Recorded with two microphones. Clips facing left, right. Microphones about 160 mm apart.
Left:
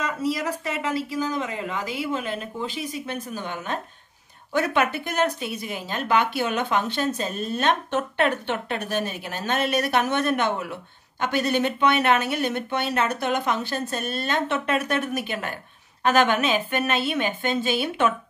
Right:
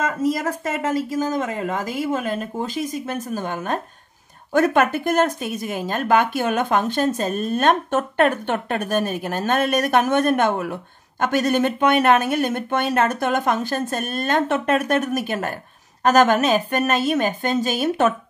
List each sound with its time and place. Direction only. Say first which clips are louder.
0.0 s speech: right 4 dB; 45° right (ahead or behind)